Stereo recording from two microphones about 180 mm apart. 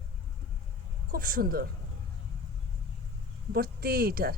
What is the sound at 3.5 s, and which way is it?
Speech, 60° right (ahead or behind).